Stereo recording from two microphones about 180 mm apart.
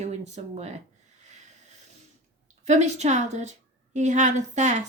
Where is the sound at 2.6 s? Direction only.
40° right (ahead or behind).